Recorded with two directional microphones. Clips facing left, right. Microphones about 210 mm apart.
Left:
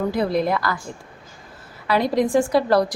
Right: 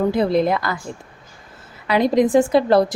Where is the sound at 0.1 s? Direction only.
25° right (ahead or behind).